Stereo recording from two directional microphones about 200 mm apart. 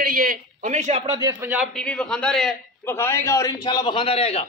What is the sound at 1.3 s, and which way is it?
Speech, 5° right (ahead or behind).